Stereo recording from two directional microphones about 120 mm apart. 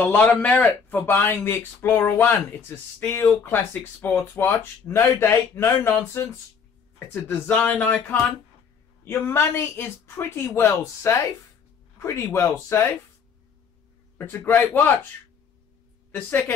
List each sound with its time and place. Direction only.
0.0 s a man's voice: 15° left (ahead or behind)
7.2 s a man's voice: 15° left (ahead or behind)
14.1 s a man's voice: 15° left (ahead or behind)
16.1 s a woman's voice: 15° left (ahead or behind)